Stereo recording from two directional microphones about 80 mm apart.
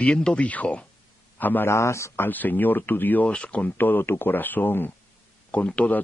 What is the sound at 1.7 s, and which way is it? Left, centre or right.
Speech, left.